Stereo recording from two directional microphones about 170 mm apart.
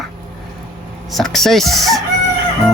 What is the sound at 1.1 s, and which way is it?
Speech, centre (ahead or behind).